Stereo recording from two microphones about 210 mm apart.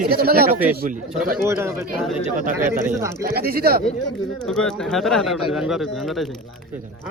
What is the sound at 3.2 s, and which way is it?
Speech, 45° right (ahead or behind).